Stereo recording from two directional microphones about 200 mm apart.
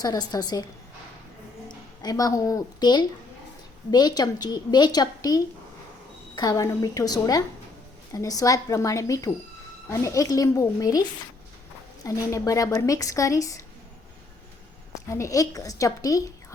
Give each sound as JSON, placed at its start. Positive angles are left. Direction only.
{"t": 0.0, "sound": "a woman's voice", "side_deg": 20}
{"t": 1.6, "sound": "a woman's voice", "side_deg": 20}
{"t": 12.0, "sound": "a woman's voice", "side_deg": 15}
{"t": 15.1, "sound": "a woman's voice", "side_deg": 15}